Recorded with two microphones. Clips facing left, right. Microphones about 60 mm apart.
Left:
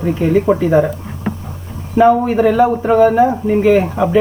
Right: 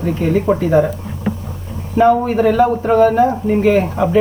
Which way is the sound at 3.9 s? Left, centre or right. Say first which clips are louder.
Left 1 dB; centre.